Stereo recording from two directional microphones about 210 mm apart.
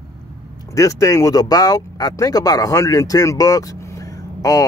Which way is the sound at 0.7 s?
15° left (ahead or behind).